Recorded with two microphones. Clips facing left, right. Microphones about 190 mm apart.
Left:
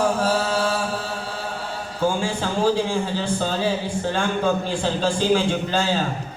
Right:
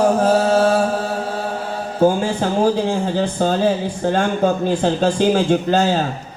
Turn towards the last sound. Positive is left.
turn(degrees=-45)  # may be behind; listen again after turning